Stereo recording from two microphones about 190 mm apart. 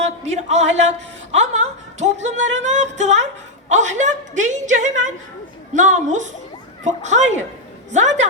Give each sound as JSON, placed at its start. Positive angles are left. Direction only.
{"t": 0.2, "sound": "speech", "side_deg": -35}